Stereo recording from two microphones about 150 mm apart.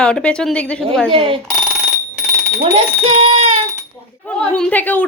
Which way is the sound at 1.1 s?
35° right (ahead or behind).